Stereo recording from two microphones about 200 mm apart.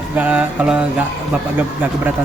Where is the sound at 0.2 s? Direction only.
5° right (ahead or behind).